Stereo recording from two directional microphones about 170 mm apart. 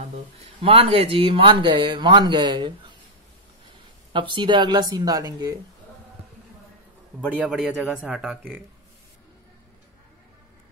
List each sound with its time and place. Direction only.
0.4 s speech: 35° right (ahead or behind)
4.1 s speech: 30° right (ahead or behind)
7.2 s speech: 5° right (ahead or behind)